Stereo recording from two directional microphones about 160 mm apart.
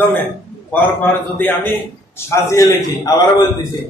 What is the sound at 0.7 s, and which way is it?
A man's voice, 10° left (ahead or behind).